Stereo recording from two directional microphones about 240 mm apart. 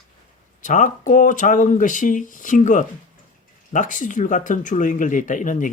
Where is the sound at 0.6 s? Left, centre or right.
Left.